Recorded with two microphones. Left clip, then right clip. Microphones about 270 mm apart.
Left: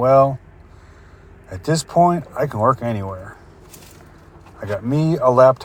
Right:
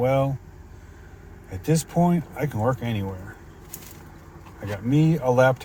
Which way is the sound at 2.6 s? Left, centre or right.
Centre.